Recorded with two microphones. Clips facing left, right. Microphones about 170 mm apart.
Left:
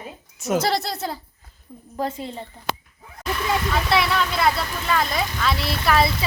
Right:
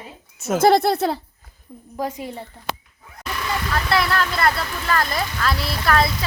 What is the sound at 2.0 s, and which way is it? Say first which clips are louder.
Speech: even; 15° right (ahead or behind).